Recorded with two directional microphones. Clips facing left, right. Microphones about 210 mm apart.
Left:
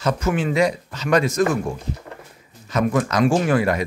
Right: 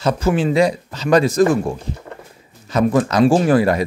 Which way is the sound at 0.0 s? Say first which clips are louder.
Right 4 dB; 30° right (ahead or behind).